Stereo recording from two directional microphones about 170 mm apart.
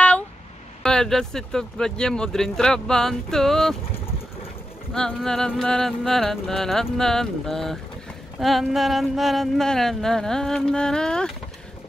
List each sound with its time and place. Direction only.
0.8 s speech: 5° left (ahead or behind)
4.9 s speech: 5° left (ahead or behind)